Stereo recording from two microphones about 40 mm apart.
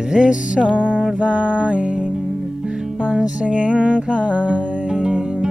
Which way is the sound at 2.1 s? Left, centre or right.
Centre.